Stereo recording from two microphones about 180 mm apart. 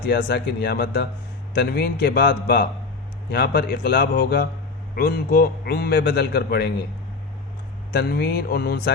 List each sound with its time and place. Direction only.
0.0 s a man's voice: 70° left (ahead or behind)
7.9 s a man's voice: 60° left (ahead or behind)